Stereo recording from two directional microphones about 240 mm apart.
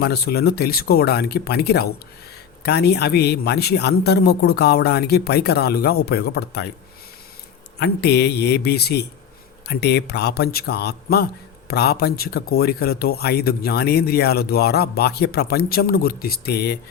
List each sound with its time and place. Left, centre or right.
0.0 s speech: left
7.8 s a man's voice: left